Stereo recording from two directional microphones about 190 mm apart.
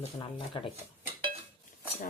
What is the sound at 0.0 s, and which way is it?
Speech, 30° left (ahead or behind).